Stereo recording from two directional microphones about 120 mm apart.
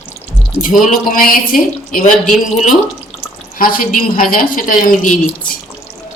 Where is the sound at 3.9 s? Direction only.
90° left.